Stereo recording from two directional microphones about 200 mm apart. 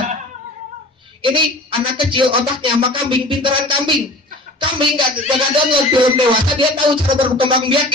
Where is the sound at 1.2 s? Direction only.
25° right (ahead or behind).